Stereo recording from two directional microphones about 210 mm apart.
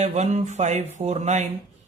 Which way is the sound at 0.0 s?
30° right (ahead or behind).